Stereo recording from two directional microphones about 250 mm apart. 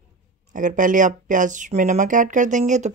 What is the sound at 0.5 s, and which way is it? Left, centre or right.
Speech, right.